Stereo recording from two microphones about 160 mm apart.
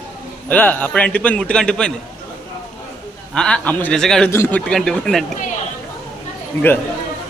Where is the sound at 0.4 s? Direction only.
10° left (ahead or behind).